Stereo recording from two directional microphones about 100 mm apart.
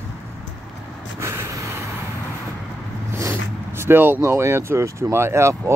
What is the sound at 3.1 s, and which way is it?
Speech, 25° right (ahead or behind).